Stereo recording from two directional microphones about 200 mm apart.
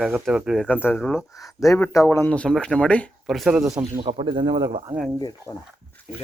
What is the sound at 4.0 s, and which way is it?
Speech, 25° right (ahead or behind).